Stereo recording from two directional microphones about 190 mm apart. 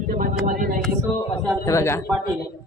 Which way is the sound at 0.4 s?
45° right (ahead or behind).